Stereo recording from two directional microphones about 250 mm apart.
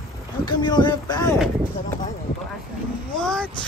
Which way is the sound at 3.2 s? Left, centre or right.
Centre.